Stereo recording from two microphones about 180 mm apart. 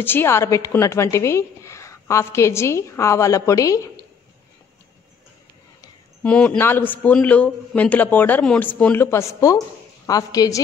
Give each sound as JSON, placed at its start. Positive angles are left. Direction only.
{"t": 0.0, "sound": "a woman's voice", "side_deg": 10}
{"t": 6.2, "sound": "a woman's voice", "side_deg": 5}